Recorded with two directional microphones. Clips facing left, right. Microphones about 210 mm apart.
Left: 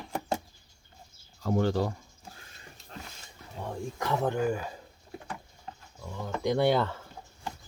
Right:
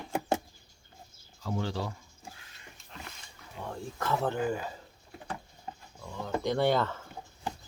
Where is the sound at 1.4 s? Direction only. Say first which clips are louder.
Left 7 dB; 50° left (ahead or behind).